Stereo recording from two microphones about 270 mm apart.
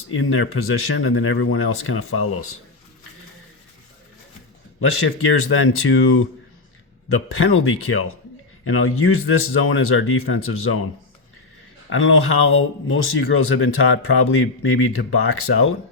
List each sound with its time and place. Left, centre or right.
0.1 s speech: left
5.0 s speech: left
7.3 s speech: left
11.9 s speech: left